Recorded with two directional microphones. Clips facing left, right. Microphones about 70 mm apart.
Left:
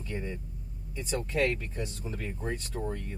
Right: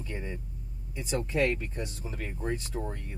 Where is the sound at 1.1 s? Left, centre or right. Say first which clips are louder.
Right 1 dB; centre.